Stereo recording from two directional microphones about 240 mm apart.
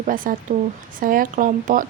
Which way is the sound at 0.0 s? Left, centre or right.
Right.